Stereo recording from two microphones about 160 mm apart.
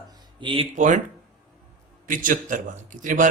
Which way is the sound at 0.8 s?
50° right (ahead or behind).